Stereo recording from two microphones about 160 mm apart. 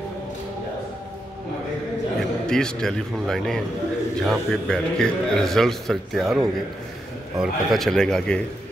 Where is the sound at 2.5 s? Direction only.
5° left (ahead or behind).